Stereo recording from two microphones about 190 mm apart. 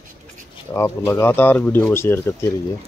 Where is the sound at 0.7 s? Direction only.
15° left (ahead or behind).